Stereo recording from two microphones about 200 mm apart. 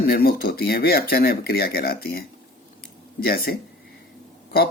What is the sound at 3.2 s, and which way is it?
Speech, 50° left (ahead or behind).